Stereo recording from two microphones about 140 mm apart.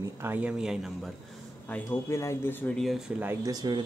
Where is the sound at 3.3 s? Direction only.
25° right (ahead or behind).